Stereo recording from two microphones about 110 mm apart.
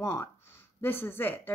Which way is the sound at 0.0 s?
25° left (ahead or behind).